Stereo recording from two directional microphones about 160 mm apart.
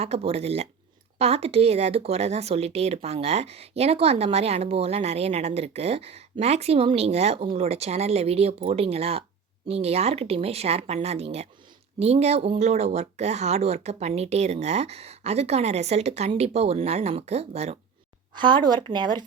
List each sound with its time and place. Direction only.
0.0 s speech: 40° right (ahead or behind)
18.3 s speech: 30° right (ahead or behind)